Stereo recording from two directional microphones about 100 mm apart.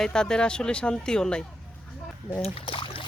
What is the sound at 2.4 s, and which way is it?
Boat, 65° left (ahead or behind).